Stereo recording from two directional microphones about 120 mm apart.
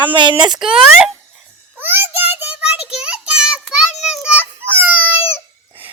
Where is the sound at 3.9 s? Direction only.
70° left (ahead or behind).